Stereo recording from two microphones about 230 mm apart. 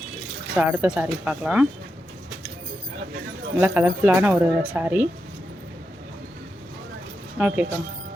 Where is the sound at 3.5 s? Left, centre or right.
Centre.